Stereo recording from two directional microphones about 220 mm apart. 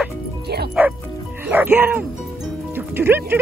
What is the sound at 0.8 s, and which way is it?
Music, 5° right (ahead or behind).